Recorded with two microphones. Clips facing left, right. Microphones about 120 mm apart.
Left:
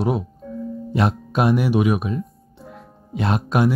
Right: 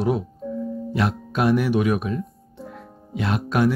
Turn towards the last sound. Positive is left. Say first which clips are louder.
# left 1 dB
turn(degrees=20)  # may be behind; listen again after turning